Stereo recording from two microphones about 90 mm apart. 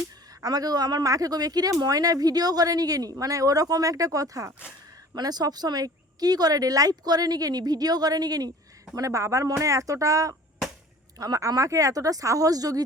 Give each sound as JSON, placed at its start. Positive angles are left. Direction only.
{"t": 0.4, "sound": "speech", "side_deg": -45}